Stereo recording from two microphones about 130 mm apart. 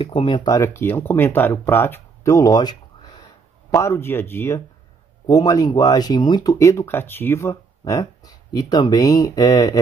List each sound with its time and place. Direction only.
0.0 s speech: 45° left (ahead or behind)
0.5 s speech: 20° left (ahead or behind)
3.7 s speech: 20° left (ahead or behind)
5.2 s speech: 30° left (ahead or behind)